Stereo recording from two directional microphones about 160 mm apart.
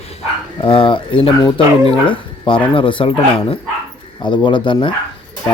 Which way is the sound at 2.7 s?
35° left (ahead or behind).